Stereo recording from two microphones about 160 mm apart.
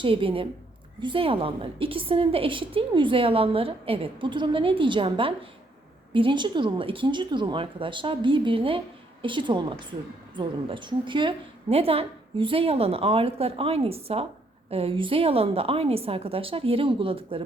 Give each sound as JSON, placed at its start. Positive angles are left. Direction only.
{"t": 0.0, "sound": "a woman's voice", "side_deg": -35}